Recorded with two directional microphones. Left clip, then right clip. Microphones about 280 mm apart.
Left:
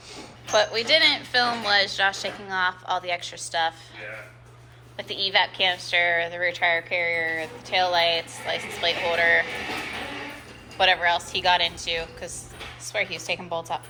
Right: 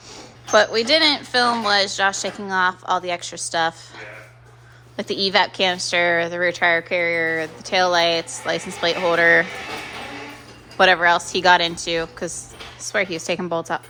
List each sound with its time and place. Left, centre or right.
0.5 s a woman's voice: right
10.8 s a woman's voice: right